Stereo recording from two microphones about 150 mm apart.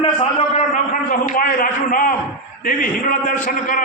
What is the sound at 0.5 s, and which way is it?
A man's voice, 60° left (ahead or behind).